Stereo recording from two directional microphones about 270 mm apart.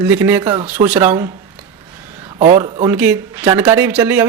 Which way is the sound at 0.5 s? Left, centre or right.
Right.